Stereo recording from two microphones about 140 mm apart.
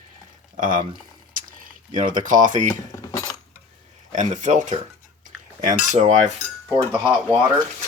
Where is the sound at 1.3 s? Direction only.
80° right.